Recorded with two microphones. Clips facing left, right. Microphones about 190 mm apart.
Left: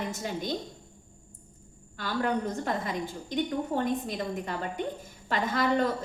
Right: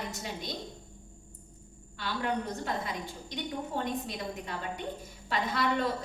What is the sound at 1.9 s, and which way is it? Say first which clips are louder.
A woman's voice: left 4 dB; 45° left (ahead or behind).